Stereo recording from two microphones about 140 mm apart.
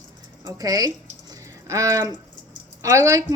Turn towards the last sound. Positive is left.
turn(degrees=-20)  # may be behind; listen again after turning